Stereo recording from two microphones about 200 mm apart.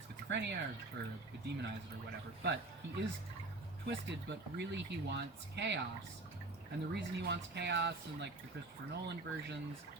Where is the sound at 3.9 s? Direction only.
60° right (ahead or behind).